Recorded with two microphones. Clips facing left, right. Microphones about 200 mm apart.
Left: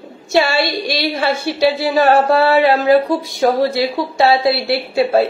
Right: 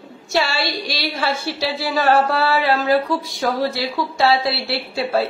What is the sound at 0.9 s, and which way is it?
A woman's voice, 20° left (ahead or behind).